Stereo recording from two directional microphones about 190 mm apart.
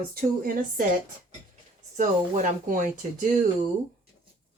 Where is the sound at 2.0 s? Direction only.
45° right (ahead or behind).